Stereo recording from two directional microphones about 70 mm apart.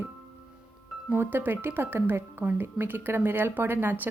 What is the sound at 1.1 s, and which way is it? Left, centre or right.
Speech, right.